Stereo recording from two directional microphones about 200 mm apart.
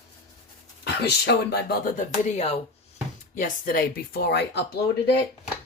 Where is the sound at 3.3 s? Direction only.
45° left (ahead or behind).